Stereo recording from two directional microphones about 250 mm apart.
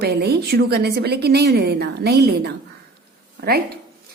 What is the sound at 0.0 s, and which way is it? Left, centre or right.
A woman's voice, right.